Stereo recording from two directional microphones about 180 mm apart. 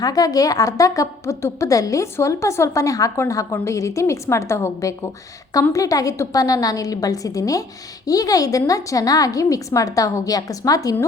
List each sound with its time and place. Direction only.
0.0 s a woman's voice: 20° left (ahead or behind)